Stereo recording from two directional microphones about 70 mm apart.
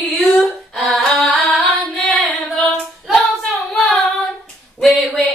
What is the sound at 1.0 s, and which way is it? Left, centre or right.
Music, centre.